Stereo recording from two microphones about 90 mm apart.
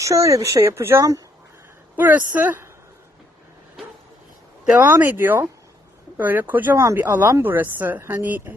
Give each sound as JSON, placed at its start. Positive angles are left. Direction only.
{"t": 0.0, "sound": "speech", "side_deg": -35}
{"t": 2.0, "sound": "speech", "side_deg": -20}
{"t": 4.6, "sound": "speech", "side_deg": -15}
{"t": 4.9, "sound": "speech", "side_deg": -25}